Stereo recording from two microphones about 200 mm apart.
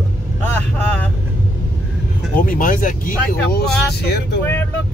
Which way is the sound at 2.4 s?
45° left (ahead or behind).